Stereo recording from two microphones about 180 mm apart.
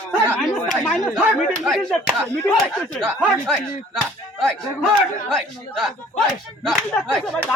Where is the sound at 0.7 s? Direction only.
Centre (ahead or behind).